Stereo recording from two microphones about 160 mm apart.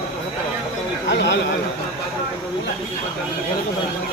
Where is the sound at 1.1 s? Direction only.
90° left.